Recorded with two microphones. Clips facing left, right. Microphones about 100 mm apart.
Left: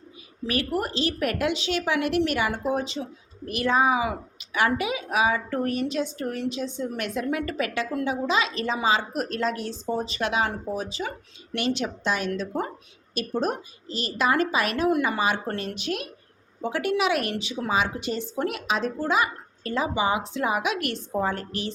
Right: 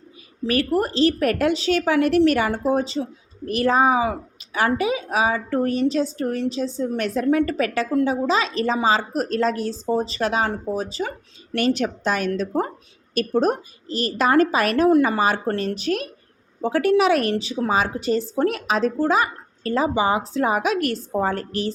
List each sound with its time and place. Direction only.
0.4 s a woman's voice: 40° right (ahead or behind)